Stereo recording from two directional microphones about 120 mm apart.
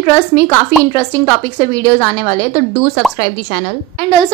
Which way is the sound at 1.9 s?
30° left (ahead or behind).